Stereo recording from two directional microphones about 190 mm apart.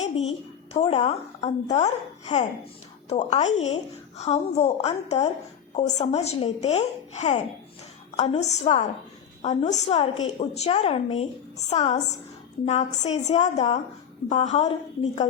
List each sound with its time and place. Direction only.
0.7 s speech: 30° left (ahead or behind)